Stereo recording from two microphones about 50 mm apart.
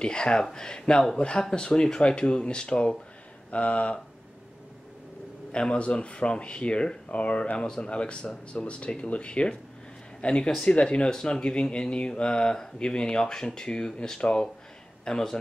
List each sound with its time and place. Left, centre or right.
0.0 s speech: centre
5.5 s speech: left